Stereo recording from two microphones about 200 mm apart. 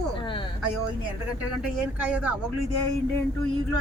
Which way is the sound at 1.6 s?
5° right (ahead or behind).